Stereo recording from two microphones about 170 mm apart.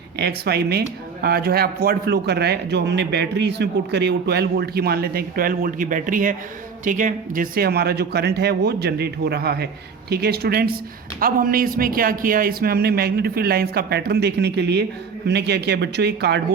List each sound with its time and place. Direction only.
0.2 s speech: 70° right (ahead or behind)